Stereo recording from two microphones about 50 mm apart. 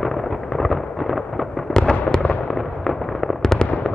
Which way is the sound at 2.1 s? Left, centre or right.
Centre.